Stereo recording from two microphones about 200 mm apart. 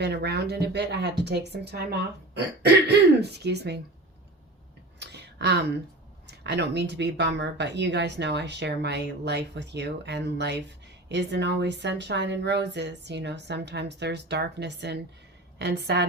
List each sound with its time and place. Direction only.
0.0 s speech: 55° right (ahead or behind)
4.9 s a sound: 55° right (ahead or behind)
6.2 s speech: 55° right (ahead or behind)